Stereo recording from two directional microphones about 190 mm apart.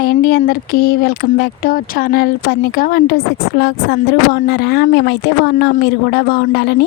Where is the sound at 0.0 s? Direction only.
55° left (ahead or behind).